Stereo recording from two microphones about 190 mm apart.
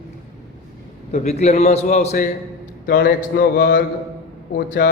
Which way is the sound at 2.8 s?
60° left (ahead or behind).